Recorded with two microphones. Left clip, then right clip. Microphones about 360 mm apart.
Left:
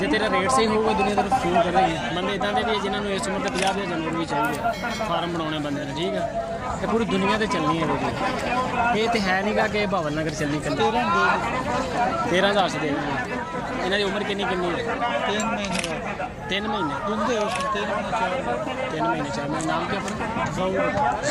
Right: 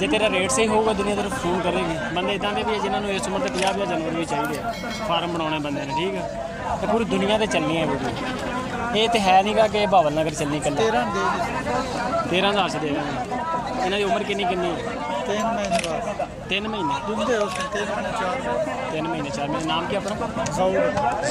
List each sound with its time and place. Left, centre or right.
0.1 s speech: centre
9.0 s speech: centre
10.8 s speech: right
12.3 s speech: centre